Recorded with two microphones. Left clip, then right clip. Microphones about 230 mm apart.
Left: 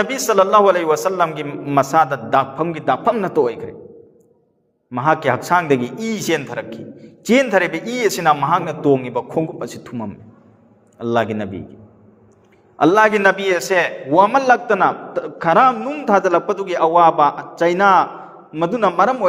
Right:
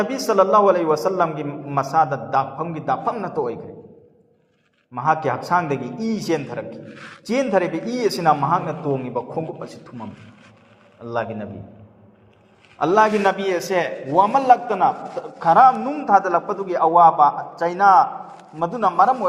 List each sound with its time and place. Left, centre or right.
0.0 s a man's voice: left
4.9 s a man's voice: left
12.8 s a man's voice: left